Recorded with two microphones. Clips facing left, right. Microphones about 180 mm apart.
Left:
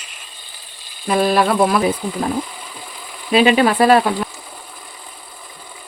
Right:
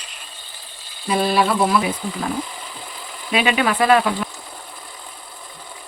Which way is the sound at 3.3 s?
30° left (ahead or behind).